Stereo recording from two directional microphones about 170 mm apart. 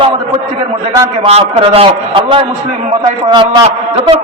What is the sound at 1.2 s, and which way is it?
A man's voice, 35° right (ahead or behind).